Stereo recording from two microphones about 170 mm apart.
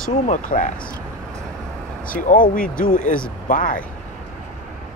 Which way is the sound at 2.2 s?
55° left (ahead or behind).